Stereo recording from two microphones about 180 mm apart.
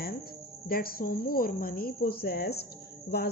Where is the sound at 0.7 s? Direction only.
55° left (ahead or behind).